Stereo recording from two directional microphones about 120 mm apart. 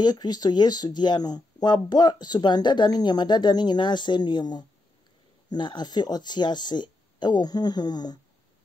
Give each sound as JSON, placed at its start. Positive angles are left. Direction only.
{"t": 0.0, "sound": "speech", "side_deg": 35}